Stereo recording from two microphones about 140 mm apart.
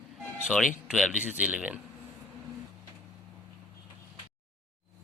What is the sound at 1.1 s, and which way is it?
Speech, 60° left (ahead or behind).